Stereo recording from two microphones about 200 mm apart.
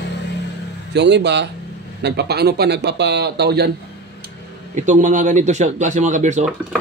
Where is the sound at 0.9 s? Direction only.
60° right (ahead or behind).